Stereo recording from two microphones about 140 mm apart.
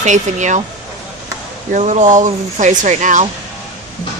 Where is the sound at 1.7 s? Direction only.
55° right (ahead or behind).